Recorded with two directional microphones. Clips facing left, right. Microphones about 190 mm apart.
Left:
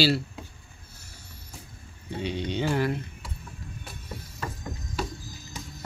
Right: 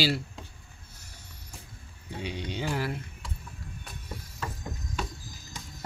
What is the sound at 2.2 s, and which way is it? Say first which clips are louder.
Speech: left 5 dB; 10° right (ahead or behind).